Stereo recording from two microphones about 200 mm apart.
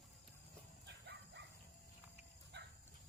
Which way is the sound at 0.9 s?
60° right (ahead or behind).